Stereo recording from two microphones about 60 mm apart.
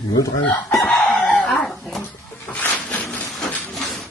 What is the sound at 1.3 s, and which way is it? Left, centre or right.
Speech, centre.